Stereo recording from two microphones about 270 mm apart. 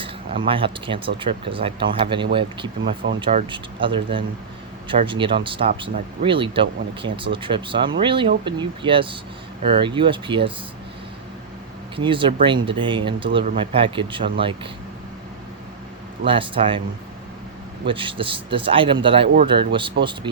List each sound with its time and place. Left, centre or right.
0.0 s speech: centre
11.9 s speech: centre
16.2 s speech: centre
17.8 s speech: centre